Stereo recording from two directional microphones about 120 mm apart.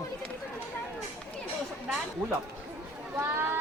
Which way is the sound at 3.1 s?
15° right (ahead or behind).